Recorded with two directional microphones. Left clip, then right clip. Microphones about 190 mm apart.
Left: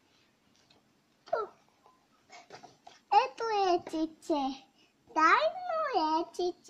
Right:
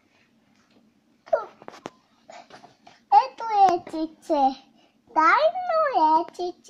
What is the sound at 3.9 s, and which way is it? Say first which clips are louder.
Speech: right 4 dB; 15° right (ahead or behind).